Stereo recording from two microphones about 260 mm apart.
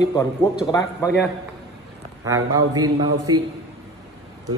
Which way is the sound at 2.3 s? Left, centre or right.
Centre.